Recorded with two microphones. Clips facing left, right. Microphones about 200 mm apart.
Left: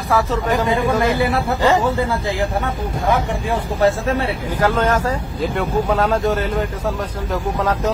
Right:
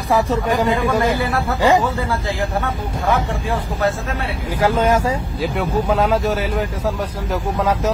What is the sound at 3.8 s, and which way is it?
Speech, 30° left (ahead or behind).